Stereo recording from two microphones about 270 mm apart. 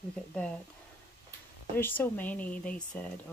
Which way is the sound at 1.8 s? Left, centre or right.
Centre.